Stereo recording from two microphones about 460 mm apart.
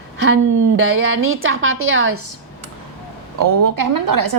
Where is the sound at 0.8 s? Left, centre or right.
Right.